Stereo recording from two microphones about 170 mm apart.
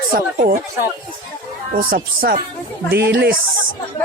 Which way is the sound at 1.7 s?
55° right (ahead or behind).